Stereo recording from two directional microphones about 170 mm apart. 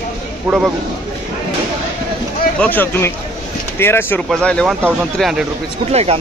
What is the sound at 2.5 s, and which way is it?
Speech, 10° left (ahead or behind).